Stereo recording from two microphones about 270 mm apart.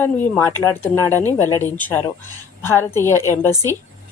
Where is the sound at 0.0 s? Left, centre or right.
Centre.